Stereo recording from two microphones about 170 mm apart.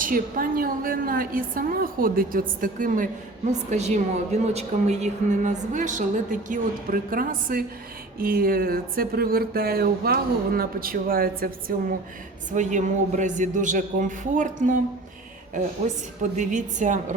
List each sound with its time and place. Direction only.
0.0 s speech: 55° right (ahead or behind)
3.5 s a woman's voice: 40° right (ahead or behind); by 11.4 s 60° right (ahead or behind)
12.5 s a woman's voice: 45° right (ahead or behind)
15.8 s a woman's voice: 45° right (ahead or behind)